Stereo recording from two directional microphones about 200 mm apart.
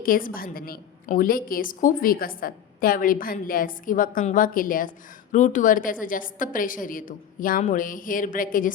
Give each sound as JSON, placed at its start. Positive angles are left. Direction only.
{"t": 0.0, "sound": "a woman's voice", "side_deg": 45}